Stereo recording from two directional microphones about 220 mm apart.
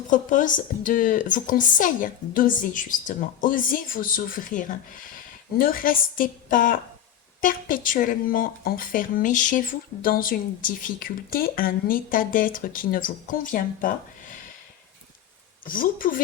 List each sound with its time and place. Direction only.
0.1 s speech: 35° left (ahead or behind)
15.6 s speech: 40° left (ahead or behind)